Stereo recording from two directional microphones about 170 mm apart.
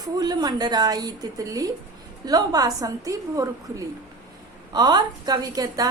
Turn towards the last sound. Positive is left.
turn(degrees=-20)  # may be behind; listen again after turning